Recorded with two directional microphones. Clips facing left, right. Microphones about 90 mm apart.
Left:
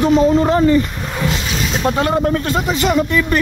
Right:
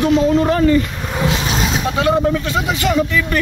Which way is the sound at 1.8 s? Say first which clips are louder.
Left 1 dB; 40° left (ahead or behind).